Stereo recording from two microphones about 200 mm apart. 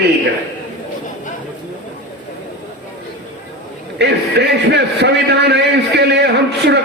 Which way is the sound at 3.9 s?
60° right (ahead or behind).